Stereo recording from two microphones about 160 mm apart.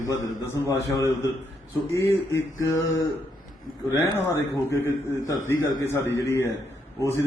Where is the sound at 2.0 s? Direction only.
20° left (ahead or behind).